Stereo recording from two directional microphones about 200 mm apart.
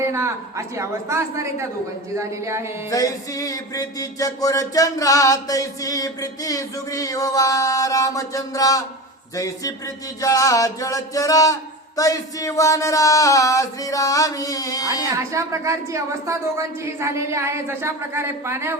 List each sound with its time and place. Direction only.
0.0 s a woman's voice: 15° right (ahead or behind)
2.9 s music: 15° left (ahead or behind)
15.2 s a woman's voice: 15° right (ahead or behind)